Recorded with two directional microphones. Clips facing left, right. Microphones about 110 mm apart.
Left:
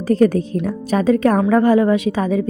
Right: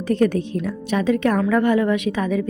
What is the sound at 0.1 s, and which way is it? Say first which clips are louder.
A woman's voice: left 4 dB; 35° left (ahead or behind).